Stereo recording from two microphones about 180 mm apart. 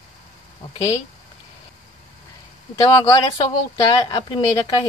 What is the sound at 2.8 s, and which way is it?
Speech, 20° left (ahead or behind).